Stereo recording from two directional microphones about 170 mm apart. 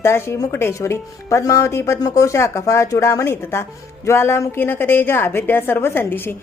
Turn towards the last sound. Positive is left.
turn(degrees=10)  # may be behind; listen again after turning